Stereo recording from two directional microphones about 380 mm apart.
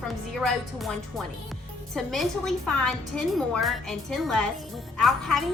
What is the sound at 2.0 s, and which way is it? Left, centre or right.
A woman's voice, centre.